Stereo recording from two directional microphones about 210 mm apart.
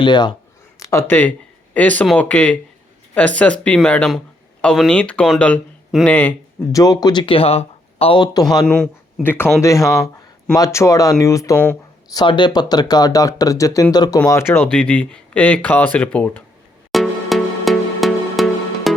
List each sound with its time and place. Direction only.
0.0 s speech: 20° left (ahead or behind)
8.6 s speech: 5° left (ahead or behind)
9.8 s a sound: centre (ahead or behind)
10.5 s speech: 15° left (ahead or behind)
12.1 s speech: 20° left (ahead or behind)
16.9 s music: centre (ahead or behind)